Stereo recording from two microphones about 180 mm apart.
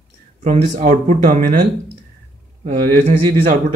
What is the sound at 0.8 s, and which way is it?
Speech, 40° right (ahead or behind).